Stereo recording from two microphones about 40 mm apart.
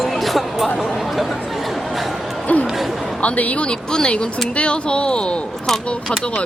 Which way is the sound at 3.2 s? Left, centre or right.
Left.